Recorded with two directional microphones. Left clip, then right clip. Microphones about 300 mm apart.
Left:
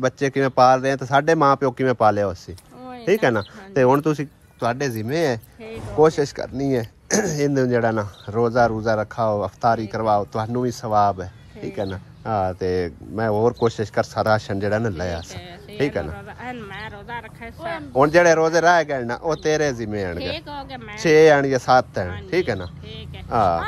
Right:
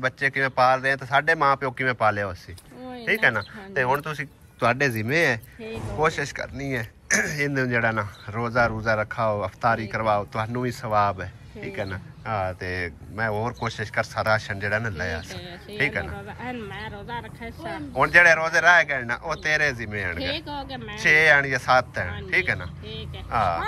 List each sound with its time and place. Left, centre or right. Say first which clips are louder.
0.0 s speech: left 3 dB; left
16.3 s speech: left 1 dB; centre
17.9 s speech: left 2 dB; left
20.2 s speech: left 1 dB; centre
21.0 s speech: left 4 dB; left